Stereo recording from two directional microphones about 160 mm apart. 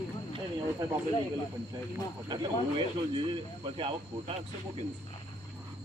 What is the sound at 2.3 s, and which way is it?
Speech, 30° right (ahead or behind).